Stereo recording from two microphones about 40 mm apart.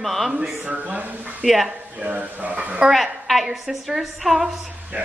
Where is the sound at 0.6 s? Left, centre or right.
Right.